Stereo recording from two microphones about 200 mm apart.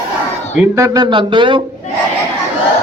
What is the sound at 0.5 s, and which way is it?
Speech, 15° right (ahead or behind).